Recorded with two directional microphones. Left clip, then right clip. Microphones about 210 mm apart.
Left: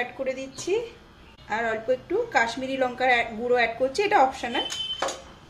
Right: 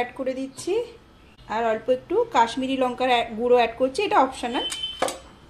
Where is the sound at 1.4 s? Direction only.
30° right (ahead or behind).